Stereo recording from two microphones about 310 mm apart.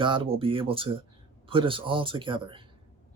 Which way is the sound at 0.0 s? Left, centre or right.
Centre.